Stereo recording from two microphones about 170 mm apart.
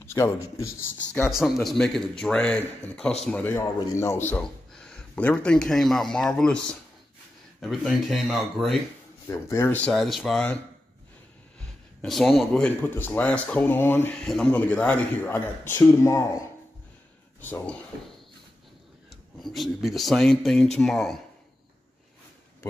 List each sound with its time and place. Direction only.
0.0 s speech: 15° left (ahead or behind)
1.2 s speech: centre (ahead or behind)
9.3 s speech: 15° left (ahead or behind)
12.0 s speech: centre (ahead or behind); by 16.3 s 15° left (ahead or behind)
17.4 s speech: 10° left (ahead or behind)
19.0 s speech: centre (ahead or behind)